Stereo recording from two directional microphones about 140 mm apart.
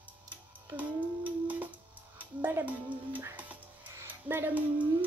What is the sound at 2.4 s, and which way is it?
Speech, 15° right (ahead or behind).